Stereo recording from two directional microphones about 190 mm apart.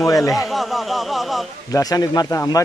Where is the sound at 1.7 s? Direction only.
20° left (ahead or behind).